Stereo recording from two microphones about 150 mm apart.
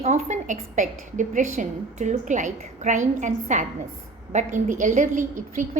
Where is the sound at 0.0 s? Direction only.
50° right (ahead or behind).